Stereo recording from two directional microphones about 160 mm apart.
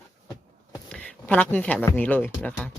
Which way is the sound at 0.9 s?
10° left (ahead or behind).